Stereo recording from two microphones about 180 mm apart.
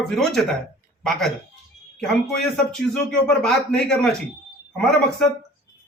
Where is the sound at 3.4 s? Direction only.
5° left (ahead or behind).